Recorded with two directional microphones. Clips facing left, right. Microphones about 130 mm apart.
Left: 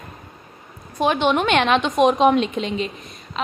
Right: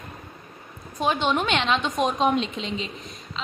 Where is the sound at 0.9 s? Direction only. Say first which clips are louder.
Left 5 dB; 65° left (ahead or behind).